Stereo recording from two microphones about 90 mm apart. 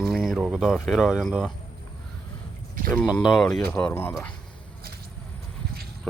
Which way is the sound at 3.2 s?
Centre (ahead or behind).